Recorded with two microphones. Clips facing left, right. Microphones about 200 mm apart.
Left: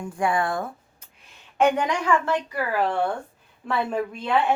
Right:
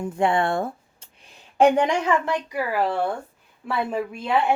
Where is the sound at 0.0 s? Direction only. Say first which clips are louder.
Right 3 dB; 25° right (ahead or behind).